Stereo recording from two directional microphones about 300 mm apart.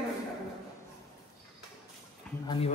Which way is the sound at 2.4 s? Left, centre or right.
Centre.